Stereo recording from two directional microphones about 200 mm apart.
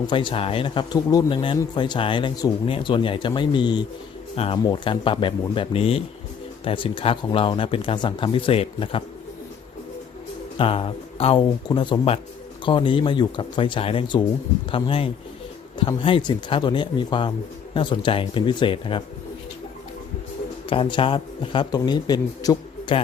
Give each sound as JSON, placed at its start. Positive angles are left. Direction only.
{"t": 0.1, "sound": "speech", "side_deg": 25}
{"t": 10.6, "sound": "speech", "side_deg": 25}
{"t": 20.7, "sound": "speech", "side_deg": 25}